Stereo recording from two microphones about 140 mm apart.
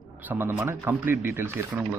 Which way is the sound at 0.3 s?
15° right (ahead or behind).